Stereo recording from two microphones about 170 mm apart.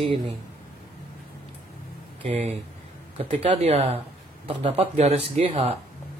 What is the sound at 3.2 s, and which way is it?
Speech, 35° right (ahead or behind).